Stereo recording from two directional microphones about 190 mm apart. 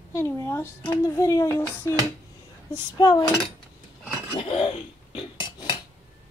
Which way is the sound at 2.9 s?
20° left (ahead or behind).